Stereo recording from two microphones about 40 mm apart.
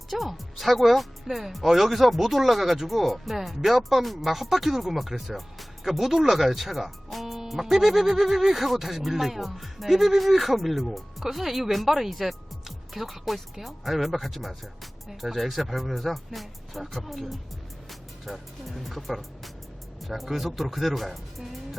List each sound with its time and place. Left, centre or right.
0.1 s speech: centre